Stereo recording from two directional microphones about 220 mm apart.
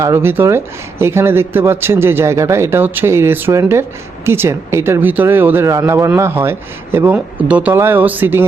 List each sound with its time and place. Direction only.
0.0 s speech: 10° right (ahead or behind)